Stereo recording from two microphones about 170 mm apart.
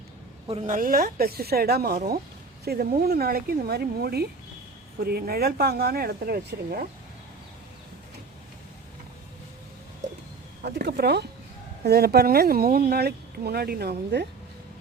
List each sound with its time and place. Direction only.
0.4 s speech: 40° right (ahead or behind); by 6.8 s 60° right (ahead or behind)
10.6 s speech: 65° right (ahead or behind)